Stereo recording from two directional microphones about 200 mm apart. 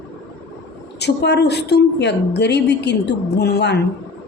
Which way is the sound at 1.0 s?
55° left (ahead or behind).